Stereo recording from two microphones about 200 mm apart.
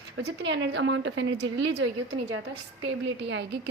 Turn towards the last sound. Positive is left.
turn(degrees=-65)  # may be behind; listen again after turning